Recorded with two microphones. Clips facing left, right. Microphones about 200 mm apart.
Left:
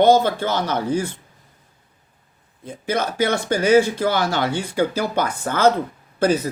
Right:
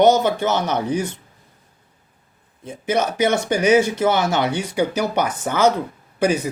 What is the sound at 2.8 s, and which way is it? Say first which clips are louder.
Speech: right 2 dB; 20° right (ahead or behind).